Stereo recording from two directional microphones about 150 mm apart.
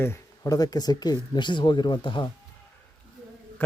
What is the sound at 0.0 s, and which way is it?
Speech, 20° left (ahead or behind).